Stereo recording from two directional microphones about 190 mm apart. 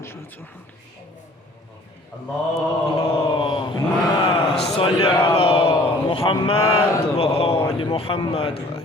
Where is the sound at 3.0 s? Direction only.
25° left (ahead or behind).